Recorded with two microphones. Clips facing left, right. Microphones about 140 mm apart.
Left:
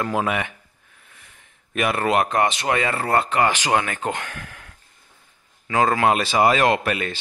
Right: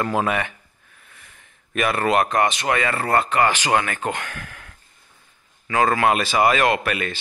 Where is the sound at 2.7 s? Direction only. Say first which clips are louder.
Even; 20° left (ahead or behind).